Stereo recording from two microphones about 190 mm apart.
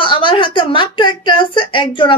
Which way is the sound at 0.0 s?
25° left (ahead or behind).